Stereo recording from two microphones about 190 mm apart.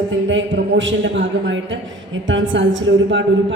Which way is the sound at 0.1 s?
75° right (ahead or behind).